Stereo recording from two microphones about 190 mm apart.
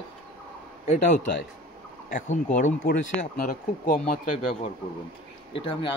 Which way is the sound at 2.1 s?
40° left (ahead or behind).